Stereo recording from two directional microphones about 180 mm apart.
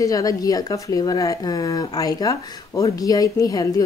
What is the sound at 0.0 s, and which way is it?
Speech, 20° left (ahead or behind).